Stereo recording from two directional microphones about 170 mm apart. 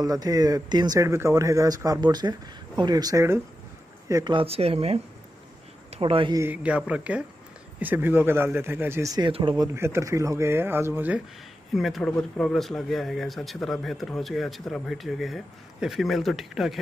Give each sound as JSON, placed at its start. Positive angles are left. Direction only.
{"t": 0.0, "sound": "speech", "side_deg": -20}
{"t": 6.4, "sound": "speech", "side_deg": -10}
{"t": 9.8, "sound": "speech", "side_deg": -15}
{"t": 11.7, "sound": "speech", "side_deg": 0}